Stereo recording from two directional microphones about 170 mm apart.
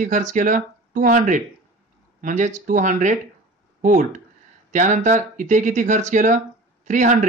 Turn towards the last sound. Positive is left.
turn(degrees=-45)  # may be behind; listen again after turning